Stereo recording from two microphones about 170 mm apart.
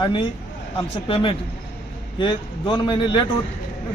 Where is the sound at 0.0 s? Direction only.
25° left (ahead or behind).